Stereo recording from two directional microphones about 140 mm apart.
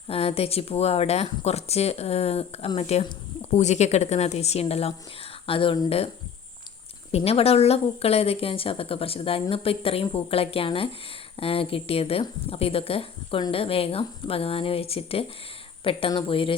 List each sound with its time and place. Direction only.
0.1 s speech: 45° left (ahead or behind)
7.2 s speech: 45° left (ahead or behind)